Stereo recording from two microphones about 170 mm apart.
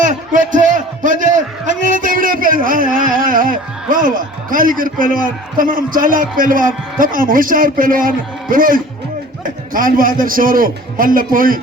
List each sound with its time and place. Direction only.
0.0 s a man's voice: 50° right (ahead or behind)